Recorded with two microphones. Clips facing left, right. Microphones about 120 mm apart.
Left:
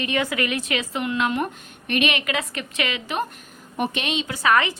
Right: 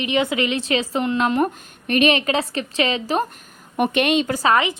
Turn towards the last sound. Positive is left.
turn(degrees=-20)  # may be behind; listen again after turning